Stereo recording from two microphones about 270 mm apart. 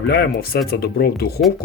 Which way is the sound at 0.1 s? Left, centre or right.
Left.